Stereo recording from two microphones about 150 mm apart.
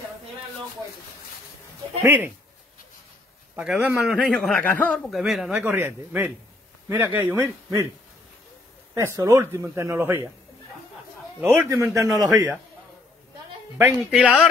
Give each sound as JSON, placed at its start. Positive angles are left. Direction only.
{"t": 2.0, "sound": "speech", "side_deg": -15}
{"t": 3.5, "sound": "speech", "side_deg": -10}
{"t": 4.0, "sound": "a man's voice", "side_deg": 5}
{"t": 5.1, "sound": "speech", "side_deg": 0}
{"t": 8.9, "sound": "speech", "side_deg": -20}
{"t": 11.4, "sound": "speech", "side_deg": -15}
{"t": 13.7, "sound": "speech", "side_deg": -5}